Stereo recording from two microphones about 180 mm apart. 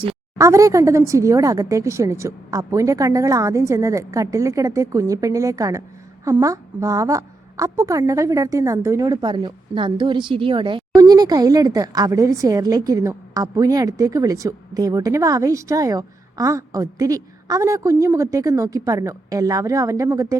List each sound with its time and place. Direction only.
0.3 s a woman's voice: 15° right (ahead or behind)